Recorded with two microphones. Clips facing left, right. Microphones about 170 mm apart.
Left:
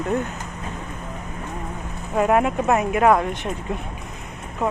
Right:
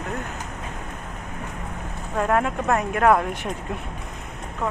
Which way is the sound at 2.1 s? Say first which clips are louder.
Left 4 dB; 15° left (ahead or behind).